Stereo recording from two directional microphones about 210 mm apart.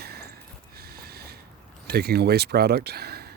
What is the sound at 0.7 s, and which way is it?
Train, 50° right (ahead or behind).